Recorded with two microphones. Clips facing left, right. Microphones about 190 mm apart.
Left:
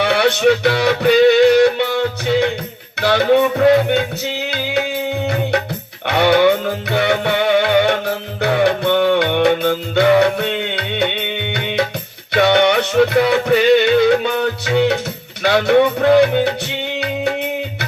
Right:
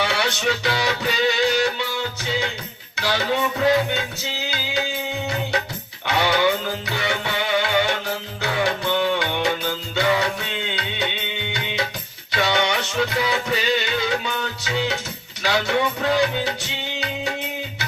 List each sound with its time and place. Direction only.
0.0 s music: 60° left (ahead or behind)